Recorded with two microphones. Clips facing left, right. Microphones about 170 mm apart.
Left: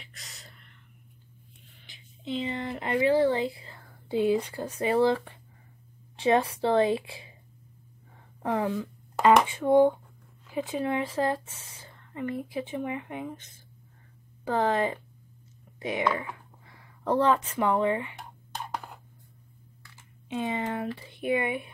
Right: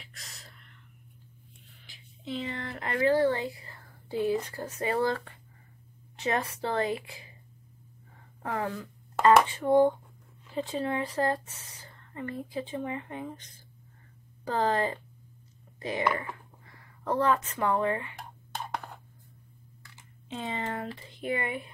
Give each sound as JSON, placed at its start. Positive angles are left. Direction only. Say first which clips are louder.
{"t": 0.0, "sound": "a sound", "louder": "left 1 dB", "side_deg": 0}
{"t": 2.3, "sound": "speech", "louder": "left 4 dB", "side_deg": 20}
{"t": 8.4, "sound": "speech", "louder": "left 5 dB", "side_deg": 15}
{"t": 14.5, "sound": "speech", "louder": "left 2 dB", "side_deg": 15}
{"t": 16.1, "sound": "a sound", "louder": "left 1 dB", "side_deg": 5}
{"t": 17.0, "sound": "speech", "louder": "left 3 dB", "side_deg": 15}
{"t": 20.2, "sound": "speech", "louder": "left 4 dB", "side_deg": 15}